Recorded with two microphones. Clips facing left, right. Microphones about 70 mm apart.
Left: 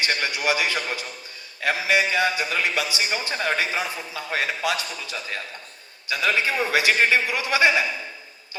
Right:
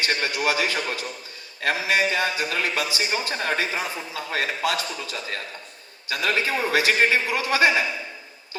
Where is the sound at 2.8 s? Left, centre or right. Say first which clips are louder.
Right 1 dB; left.